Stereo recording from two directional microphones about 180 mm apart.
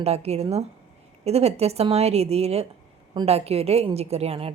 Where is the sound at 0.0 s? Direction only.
35° right (ahead or behind).